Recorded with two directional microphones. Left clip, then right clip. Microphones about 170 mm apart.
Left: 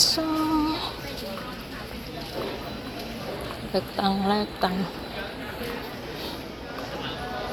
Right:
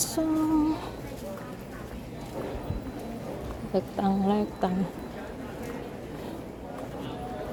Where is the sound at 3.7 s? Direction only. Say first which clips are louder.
Left 2 dB; 25° right (ahead or behind).